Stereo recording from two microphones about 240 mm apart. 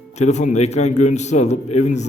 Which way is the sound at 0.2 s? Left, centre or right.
Left.